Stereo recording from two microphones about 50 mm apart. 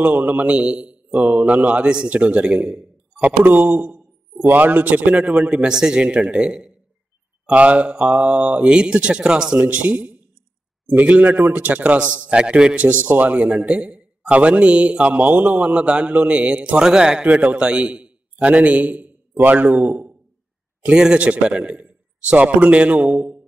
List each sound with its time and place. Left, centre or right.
0.0 s a man's voice: right
5.7 s a man's voice: centre
9.7 s a man's voice: right
16.8 s speech: centre
17.3 s a man's voice: right
19.3 s speech: right
19.9 s a sound: right
20.9 s a man's voice: centre